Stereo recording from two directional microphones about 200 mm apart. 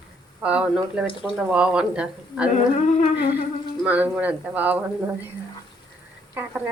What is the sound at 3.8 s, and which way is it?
Speech, 5° right (ahead or behind).